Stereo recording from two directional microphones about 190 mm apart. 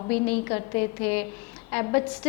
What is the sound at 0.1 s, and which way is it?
A woman's voice, 10° left (ahead or behind).